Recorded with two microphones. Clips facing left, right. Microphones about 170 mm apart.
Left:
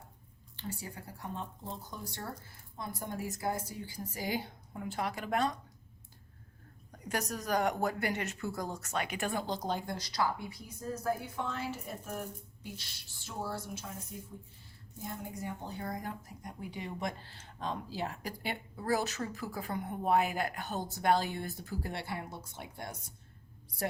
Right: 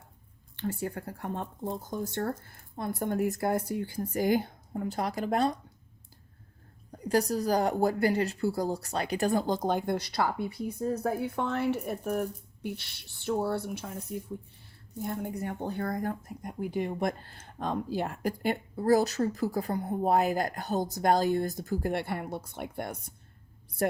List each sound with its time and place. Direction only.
0.5 s speech: 55° right (ahead or behind); by 5.5 s 35° right (ahead or behind)
7.0 s a woman's voice: 35° right (ahead or behind); by 23.1 s 55° right (ahead or behind)